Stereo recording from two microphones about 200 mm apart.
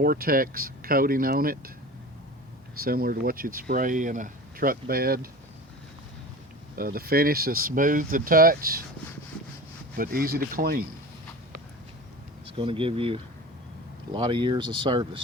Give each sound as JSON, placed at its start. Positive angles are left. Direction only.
{"t": 0.0, "sound": "speech", "side_deg": -45}
{"t": 2.8, "sound": "speech", "side_deg": -45}
{"t": 6.7, "sound": "speech", "side_deg": -50}
{"t": 9.9, "sound": "speech", "side_deg": -45}
{"t": 12.5, "sound": "speech", "side_deg": -25}